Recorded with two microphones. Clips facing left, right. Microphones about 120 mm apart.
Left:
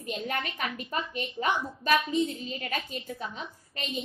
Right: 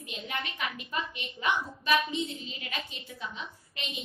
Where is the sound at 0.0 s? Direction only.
45° left (ahead or behind).